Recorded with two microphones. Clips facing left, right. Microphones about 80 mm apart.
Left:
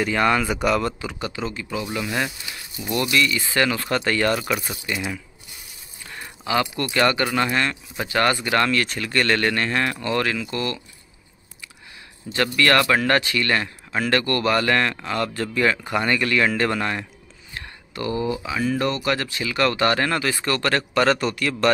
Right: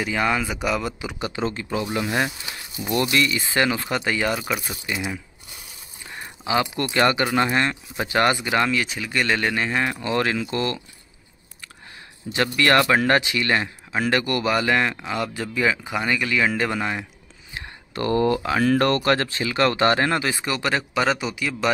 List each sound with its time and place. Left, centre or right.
0.0 s speech: centre
1.0 s speech: right
1.4 s speech: right; by 4.9 s centre
6.0 s speech: centre
12.3 s speech: right
18.1 s speech: right
19.1 s speech: right; by 21.7 s centre